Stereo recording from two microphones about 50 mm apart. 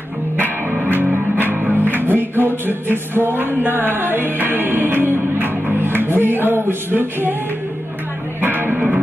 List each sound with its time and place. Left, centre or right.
0.4 s music: right
8.4 s music: right